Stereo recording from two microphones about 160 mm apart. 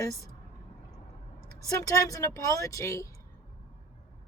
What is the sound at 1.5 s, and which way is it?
Speech, 20° left (ahead or behind).